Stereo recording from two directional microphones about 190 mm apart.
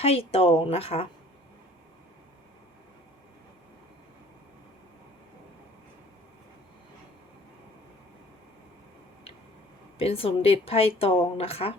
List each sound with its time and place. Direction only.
0.0 s speech: 30° left (ahead or behind)
10.0 s speech: 30° left (ahead or behind)